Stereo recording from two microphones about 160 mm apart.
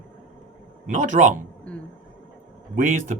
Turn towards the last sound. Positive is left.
turn(degrees=-55)  # may be behind; listen again after turning